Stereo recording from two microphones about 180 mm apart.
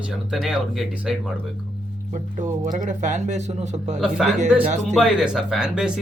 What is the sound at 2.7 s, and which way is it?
Speech, 45° right (ahead or behind).